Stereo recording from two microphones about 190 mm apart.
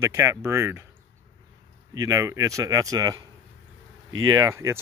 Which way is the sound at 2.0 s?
15° right (ahead or behind).